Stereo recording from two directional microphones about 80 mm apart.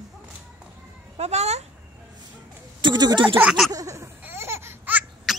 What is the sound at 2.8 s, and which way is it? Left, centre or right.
Speech, right.